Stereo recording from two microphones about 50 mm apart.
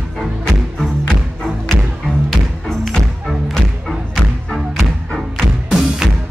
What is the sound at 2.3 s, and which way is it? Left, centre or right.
Music, centre.